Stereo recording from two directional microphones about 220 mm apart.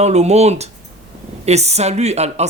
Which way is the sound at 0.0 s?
30° right (ahead or behind).